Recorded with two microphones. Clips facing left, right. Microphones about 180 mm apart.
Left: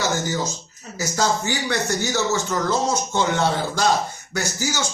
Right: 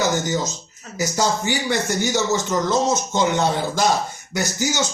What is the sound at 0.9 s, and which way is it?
Speech, 15° right (ahead or behind).